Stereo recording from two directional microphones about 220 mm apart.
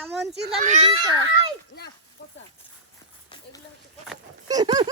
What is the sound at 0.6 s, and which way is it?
Speech, 30° right (ahead or behind).